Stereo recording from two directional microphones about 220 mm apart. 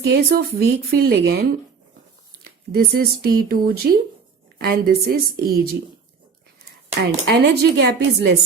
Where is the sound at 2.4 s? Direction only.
45° right (ahead or behind).